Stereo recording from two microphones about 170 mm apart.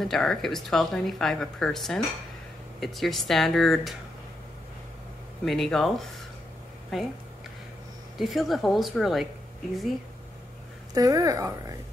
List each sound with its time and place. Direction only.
0.0 s speech: centre (ahead or behind)
5.4 s speech: centre (ahead or behind)
8.2 s speech: centre (ahead or behind)
11.0 s speech: 20° right (ahead or behind)